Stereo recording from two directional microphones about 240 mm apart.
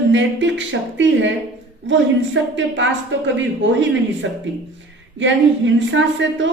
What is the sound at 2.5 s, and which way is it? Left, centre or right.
Speech, right.